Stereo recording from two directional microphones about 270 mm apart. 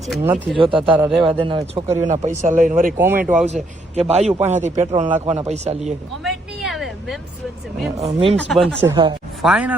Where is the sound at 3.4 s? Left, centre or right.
Right.